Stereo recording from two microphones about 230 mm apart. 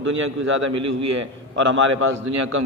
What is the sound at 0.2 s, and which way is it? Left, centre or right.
A man's voice, right.